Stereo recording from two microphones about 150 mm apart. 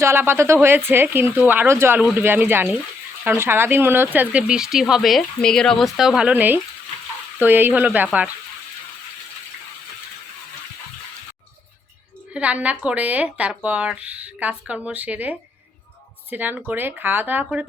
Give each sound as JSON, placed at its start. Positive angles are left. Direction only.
{"t": 0.0, "sound": "speech", "side_deg": -15}
{"t": 12.3, "sound": "speech", "side_deg": -10}